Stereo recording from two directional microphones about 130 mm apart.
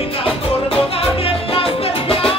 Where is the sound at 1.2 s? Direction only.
45° left (ahead or behind).